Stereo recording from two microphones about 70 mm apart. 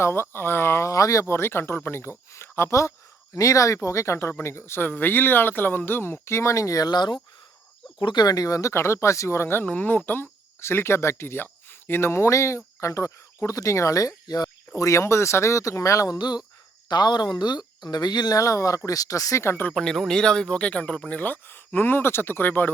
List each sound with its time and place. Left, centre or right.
0.0 s speech: left
1.3 s speech: left
14.8 s speech: left
16.1 s speech: left
19.7 s speech: centre
21.2 s speech: left